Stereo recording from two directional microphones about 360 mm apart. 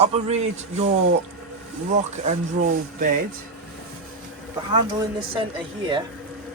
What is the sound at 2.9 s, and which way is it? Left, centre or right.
Speech, right.